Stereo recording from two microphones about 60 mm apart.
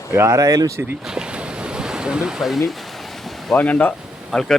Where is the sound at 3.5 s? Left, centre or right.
Left.